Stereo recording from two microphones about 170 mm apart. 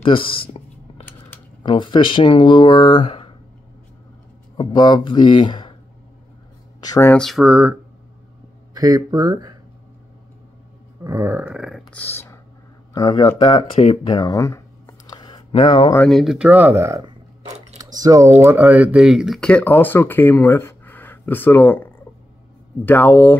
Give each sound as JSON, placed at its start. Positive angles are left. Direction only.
{"t": 0.0, "sound": "speech", "side_deg": 30}
{"t": 1.6, "sound": "speech", "side_deg": 30}
{"t": 4.6, "sound": "speech", "side_deg": 25}
{"t": 6.8, "sound": "speech", "side_deg": 20}
{"t": 7.2, "sound": "a sound", "side_deg": 0}
{"t": 8.7, "sound": "speech", "side_deg": -20}
{"t": 11.1, "sound": "a sound", "side_deg": -15}
{"t": 11.9, "sound": "speech", "side_deg": 10}
{"t": 14.0, "sound": "a sound", "side_deg": 25}
{"t": 15.5, "sound": "speech", "side_deg": 30}
{"t": 16.1, "sound": "speech", "side_deg": 0}
{"t": 16.4, "sound": "a sound", "side_deg": -10}
{"t": 17.9, "sound": "speech", "side_deg": -20}